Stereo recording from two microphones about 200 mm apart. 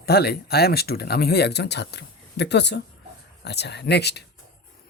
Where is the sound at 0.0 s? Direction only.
50° left (ahead or behind).